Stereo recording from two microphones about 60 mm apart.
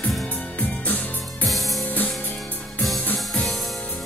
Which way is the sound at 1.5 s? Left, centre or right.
Centre.